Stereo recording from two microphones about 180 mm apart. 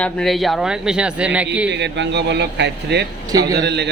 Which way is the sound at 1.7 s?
75° right (ahead or behind).